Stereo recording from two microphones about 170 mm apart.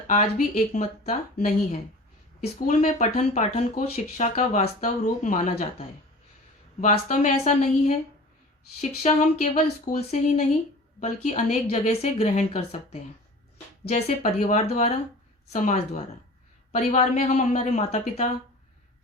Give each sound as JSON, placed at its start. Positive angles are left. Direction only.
{"t": 0.1, "sound": "speech", "side_deg": 45}
{"t": 2.4, "sound": "speech", "side_deg": 45}
{"t": 6.8, "sound": "a woman's voice", "side_deg": 40}